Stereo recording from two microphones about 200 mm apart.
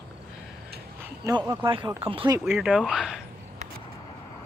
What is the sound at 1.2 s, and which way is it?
Speech, 15° right (ahead or behind).